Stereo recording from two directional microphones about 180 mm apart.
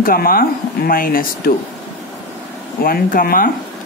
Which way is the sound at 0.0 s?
55° left (ahead or behind).